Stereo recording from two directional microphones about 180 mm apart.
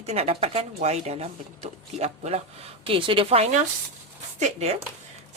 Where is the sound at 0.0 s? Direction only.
35° right (ahead or behind).